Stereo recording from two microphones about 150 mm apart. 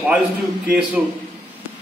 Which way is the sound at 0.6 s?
Centre (ahead or behind).